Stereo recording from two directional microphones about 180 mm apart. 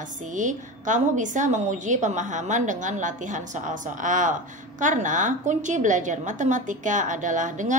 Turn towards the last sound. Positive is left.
turn(degrees=-45)  # may be behind; listen again after turning